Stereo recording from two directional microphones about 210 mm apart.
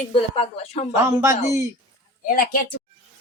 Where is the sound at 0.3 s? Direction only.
30° left (ahead or behind).